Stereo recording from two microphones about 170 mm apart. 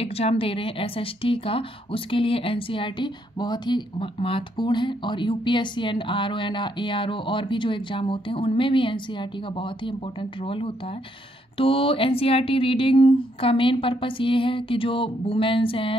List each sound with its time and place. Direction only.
0.0 s speech: 35° left (ahead or behind)